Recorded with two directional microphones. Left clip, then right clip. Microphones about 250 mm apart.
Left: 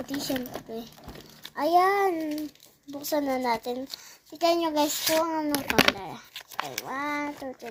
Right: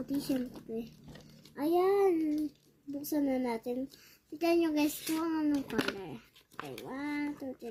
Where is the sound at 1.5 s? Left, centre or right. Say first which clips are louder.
Left 7 dB; centre.